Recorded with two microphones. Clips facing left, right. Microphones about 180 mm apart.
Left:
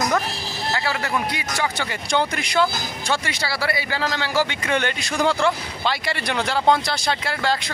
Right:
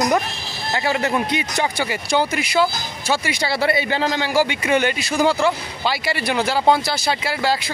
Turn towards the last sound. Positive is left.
turn(degrees=-5)  # may be behind; listen again after turning